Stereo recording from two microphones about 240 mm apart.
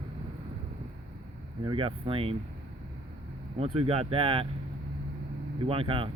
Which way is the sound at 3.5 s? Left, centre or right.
Right.